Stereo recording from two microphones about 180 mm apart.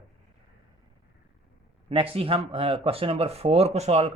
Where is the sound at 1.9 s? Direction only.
30° right (ahead or behind).